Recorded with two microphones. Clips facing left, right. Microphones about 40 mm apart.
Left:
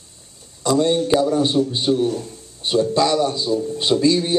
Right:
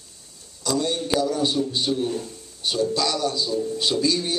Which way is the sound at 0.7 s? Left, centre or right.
Left.